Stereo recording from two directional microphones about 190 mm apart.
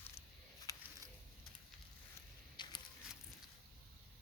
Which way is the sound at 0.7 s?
15° left (ahead or behind).